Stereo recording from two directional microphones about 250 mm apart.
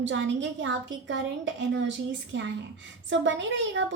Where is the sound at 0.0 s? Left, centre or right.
Right.